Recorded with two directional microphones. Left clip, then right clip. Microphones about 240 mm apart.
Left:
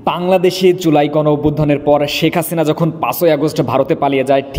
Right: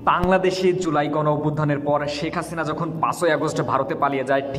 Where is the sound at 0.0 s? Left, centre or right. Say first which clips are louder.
Left 5 dB; left.